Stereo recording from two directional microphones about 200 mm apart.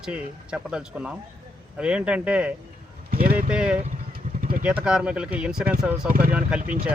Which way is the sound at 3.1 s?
50° right (ahead or behind).